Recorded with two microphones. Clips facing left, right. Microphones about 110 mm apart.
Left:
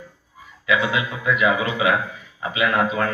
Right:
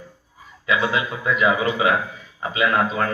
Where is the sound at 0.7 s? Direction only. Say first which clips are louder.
Even; 35° right (ahead or behind).